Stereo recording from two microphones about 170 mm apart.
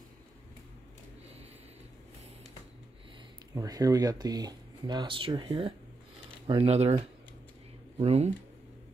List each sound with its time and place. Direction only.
3.5 s speech: 20° right (ahead or behind); by 7.0 s 40° right (ahead or behind)
8.0 s speech: 40° right (ahead or behind)